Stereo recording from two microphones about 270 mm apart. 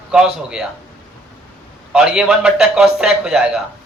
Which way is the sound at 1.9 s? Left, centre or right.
Centre.